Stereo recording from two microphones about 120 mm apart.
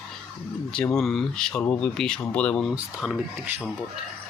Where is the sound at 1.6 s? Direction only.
15° left (ahead or behind).